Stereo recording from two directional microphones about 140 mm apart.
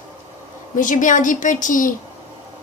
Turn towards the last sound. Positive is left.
turn(degrees=70)  # may be behind; listen again after turning